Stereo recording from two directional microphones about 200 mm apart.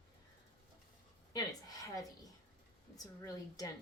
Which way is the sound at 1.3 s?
20° left (ahead or behind).